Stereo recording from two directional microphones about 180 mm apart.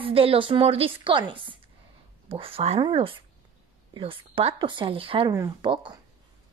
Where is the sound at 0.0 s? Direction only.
30° right (ahead or behind).